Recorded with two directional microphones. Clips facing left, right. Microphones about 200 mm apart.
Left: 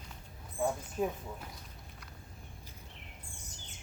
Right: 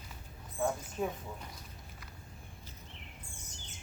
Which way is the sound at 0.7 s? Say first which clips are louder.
Left 2 dB; 5° left (ahead or behind).